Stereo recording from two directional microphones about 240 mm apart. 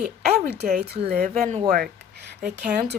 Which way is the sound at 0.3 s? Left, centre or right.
Right.